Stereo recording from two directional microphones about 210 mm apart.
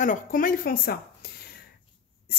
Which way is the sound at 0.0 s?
40° left (ahead or behind).